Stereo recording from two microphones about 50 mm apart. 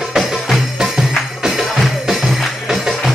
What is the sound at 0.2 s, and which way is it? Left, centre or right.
Music, centre.